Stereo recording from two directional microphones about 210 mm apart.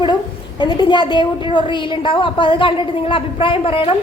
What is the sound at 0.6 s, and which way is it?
A woman's voice, 20° left (ahead or behind).